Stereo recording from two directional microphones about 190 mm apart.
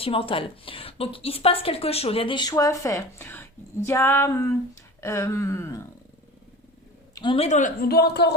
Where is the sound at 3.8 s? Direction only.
15° left (ahead or behind).